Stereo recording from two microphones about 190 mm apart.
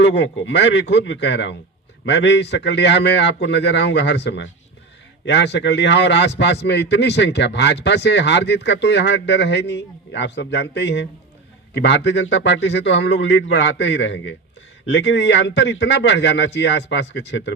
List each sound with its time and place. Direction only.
0.0 s a man's voice: 70° left (ahead or behind)